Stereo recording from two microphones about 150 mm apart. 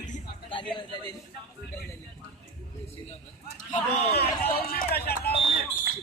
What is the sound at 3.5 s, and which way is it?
Speech, 50° left (ahead or behind).